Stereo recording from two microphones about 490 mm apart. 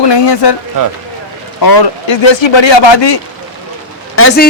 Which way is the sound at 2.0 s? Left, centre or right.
Left.